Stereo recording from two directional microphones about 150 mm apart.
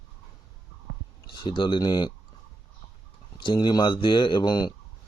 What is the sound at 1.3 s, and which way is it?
Speech, 30° left (ahead or behind).